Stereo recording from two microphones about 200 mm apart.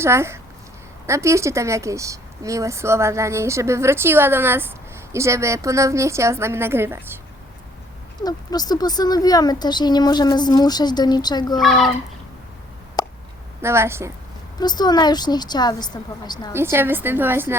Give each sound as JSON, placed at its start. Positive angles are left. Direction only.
{"t": 0.0, "sound": "speech", "side_deg": -15}
{"t": 8.2, "sound": "speech", "side_deg": 20}
{"t": 11.6, "sound": "speech", "side_deg": 0}
{"t": 13.0, "sound": "a sound", "side_deg": 20}
{"t": 13.6, "sound": "speech", "side_deg": -15}
{"t": 14.6, "sound": "speech", "side_deg": 20}
{"t": 16.6, "sound": "speech", "side_deg": -10}